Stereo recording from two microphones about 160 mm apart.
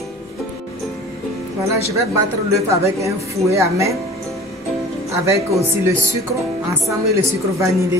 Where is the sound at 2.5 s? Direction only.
20° right (ahead or behind).